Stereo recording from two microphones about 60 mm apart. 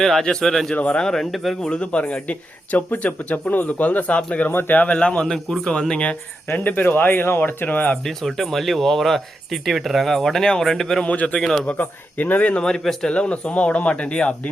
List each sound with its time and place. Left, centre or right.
0.0 s a man's voice: centre
0.8 s speech: left
1.0 s speech: centre
1.6 s speech: centre
4.4 s a man's voice: left; by 6.1 s centre
6.5 s speech: left
8.0 s speech: centre
11.0 s speech: left
12.6 s a man's voice: centre
13.1 s speech: centre